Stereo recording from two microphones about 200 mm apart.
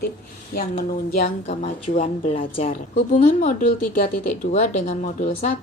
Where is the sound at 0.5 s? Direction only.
45° left (ahead or behind).